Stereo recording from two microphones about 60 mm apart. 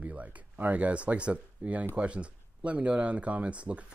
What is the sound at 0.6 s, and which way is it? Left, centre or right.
Speech, right.